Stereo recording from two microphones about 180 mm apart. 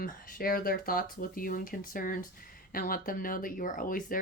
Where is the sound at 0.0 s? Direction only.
55° left (ahead or behind).